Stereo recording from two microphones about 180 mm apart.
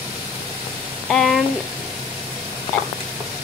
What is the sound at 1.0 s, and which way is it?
Speech, centre (ahead or behind).